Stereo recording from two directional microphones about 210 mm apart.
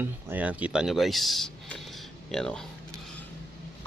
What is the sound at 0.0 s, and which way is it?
Speech, 10° right (ahead or behind).